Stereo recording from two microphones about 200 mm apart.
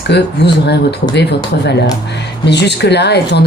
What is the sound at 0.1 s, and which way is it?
A woman's voice, 55° left (ahead or behind).